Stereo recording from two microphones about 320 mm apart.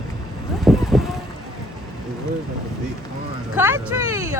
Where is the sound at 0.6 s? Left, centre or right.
Centre.